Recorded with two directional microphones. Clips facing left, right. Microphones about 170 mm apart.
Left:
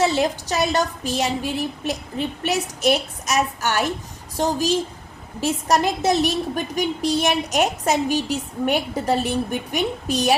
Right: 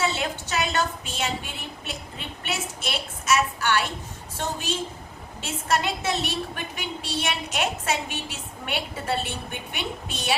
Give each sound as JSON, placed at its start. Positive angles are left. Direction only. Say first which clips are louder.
{"t": 0.0, "sound": "a woman's voice", "louder": "left 7 dB", "side_deg": 40}